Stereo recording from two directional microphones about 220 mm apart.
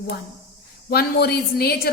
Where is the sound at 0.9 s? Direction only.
45° left (ahead or behind).